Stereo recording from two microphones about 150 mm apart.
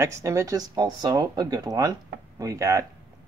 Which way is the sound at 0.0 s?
20° right (ahead or behind).